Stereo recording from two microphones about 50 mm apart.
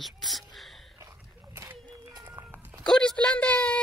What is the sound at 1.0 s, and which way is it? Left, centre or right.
Dog, right.